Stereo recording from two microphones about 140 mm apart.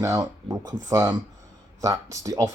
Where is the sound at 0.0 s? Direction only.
25° right (ahead or behind).